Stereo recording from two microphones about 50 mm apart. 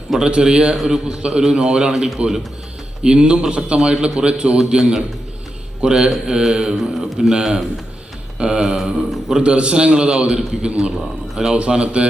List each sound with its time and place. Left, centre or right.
0.2 s a man's voice: centre
8.4 s a sound: centre
8.6 s a man's voice: centre
9.4 s a man's voice: right